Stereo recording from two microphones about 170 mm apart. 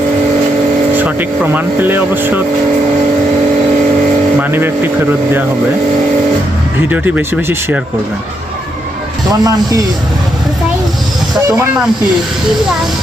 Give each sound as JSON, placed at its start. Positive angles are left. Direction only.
{"t": 1.5, "sound": "speech", "side_deg": -10}
{"t": 4.4, "sound": "speech", "side_deg": -10}
{"t": 6.8, "sound": "speech", "side_deg": -10}
{"t": 9.4, "sound": "speech", "side_deg": -20}